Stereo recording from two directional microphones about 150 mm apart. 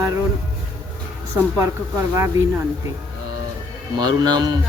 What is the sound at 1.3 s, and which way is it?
Speech, 20° right (ahead or behind).